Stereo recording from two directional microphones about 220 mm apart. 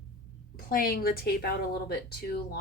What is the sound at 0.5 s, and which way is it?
Speech, 40° left (ahead or behind).